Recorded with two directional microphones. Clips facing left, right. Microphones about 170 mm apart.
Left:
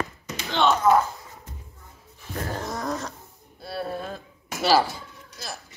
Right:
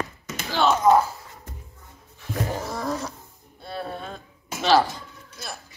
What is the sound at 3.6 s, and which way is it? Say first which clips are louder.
Dishes: left 2 dB; 5° left (ahead or behind).